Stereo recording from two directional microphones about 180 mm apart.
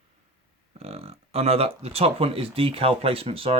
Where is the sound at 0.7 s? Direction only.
35° right (ahead or behind).